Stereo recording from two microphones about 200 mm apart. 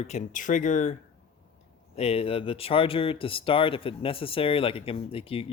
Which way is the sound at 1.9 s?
30° left (ahead or behind).